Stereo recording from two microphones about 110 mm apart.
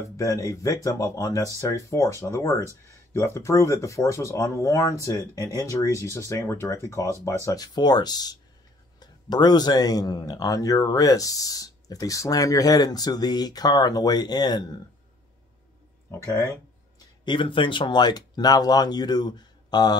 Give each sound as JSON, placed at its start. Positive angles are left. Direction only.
{"t": 0.2, "sound": "speech", "side_deg": 30}
{"t": 16.1, "sound": "speech", "side_deg": 25}
{"t": 17.2, "sound": "speech", "side_deg": 45}